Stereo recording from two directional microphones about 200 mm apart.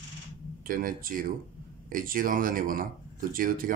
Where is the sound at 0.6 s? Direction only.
45° right (ahead or behind).